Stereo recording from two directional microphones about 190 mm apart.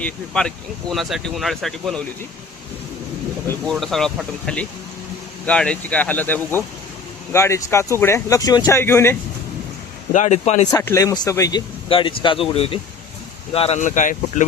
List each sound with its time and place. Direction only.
0.0 s speech: 5° left (ahead or behind)
3.7 s speech: centre (ahead or behind)
10.1 s speech: 40° left (ahead or behind)
10.7 s speech: 15° left (ahead or behind); by 14.4 s 40° left (ahead or behind)